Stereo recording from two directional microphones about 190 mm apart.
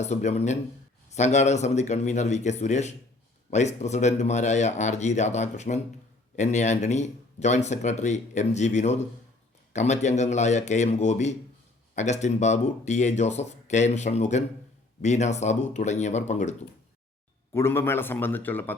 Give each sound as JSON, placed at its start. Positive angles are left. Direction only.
{"t": 0.0, "sound": "speech", "side_deg": 35}
{"t": 17.5, "sound": "a man's voice", "side_deg": 15}